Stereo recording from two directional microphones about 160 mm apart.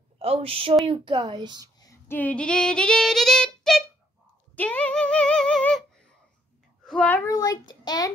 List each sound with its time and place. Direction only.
0.2 s speech: 40° right (ahead or behind)
1.8 s female singing: 15° left (ahead or behind)
4.6 s a child's voice: 10° left (ahead or behind)
7.2 s a child's voice: 25° left (ahead or behind)